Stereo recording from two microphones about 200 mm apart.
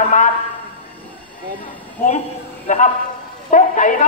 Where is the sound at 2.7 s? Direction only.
35° left (ahead or behind).